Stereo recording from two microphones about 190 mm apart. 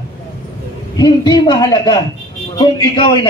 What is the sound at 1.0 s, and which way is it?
A man's voice, 20° left (ahead or behind).